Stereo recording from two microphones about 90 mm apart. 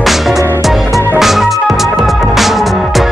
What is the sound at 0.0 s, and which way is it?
Music, centre (ahead or behind).